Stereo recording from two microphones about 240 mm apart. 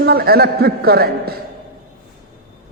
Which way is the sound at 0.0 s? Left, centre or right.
Right.